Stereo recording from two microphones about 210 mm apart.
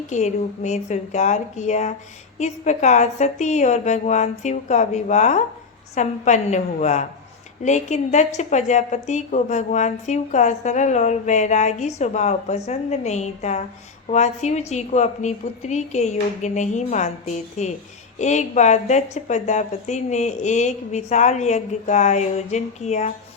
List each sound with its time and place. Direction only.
0.1 s a woman's voice: 35° left (ahead or behind)